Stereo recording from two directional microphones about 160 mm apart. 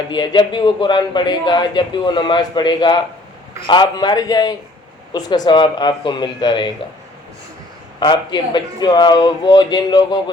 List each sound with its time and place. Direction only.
0.1 s a man's voice: 30° left (ahead or behind)
7.9 s a man's voice: 30° left (ahead or behind)